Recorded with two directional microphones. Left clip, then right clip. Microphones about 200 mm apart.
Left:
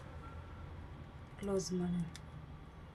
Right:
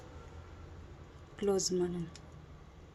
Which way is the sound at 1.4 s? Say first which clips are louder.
Right 6 dB; 50° right (ahead or behind).